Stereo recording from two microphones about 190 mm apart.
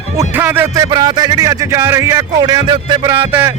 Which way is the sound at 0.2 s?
10° right (ahead or behind).